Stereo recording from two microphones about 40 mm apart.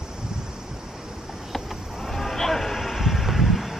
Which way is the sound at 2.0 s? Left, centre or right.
Centre.